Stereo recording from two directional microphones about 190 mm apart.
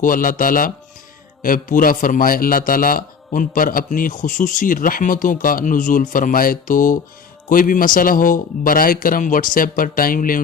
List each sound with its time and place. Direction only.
0.0 s a man's voice: 45° left (ahead or behind)